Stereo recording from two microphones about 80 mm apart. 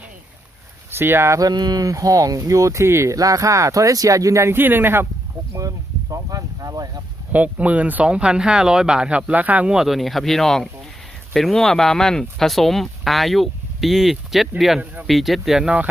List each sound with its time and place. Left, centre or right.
0.9 s speech: right
1.4 s speech: right
5.5 s speech: right
7.3 s speech: centre
9.7 s speech: centre